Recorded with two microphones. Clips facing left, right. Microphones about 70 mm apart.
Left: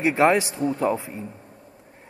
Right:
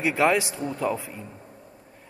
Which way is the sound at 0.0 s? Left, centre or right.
Left.